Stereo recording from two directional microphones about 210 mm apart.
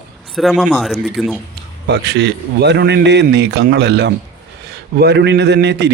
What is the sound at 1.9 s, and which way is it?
A man's voice, 55° right (ahead or behind).